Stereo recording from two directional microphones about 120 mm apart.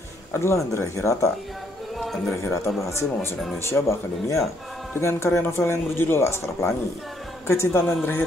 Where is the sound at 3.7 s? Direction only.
25° left (ahead or behind).